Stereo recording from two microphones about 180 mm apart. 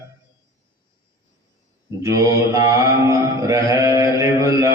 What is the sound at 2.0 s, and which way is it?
Mantra, 15° right (ahead or behind).